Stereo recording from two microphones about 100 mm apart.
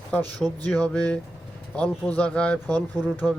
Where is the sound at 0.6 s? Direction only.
15° left (ahead or behind).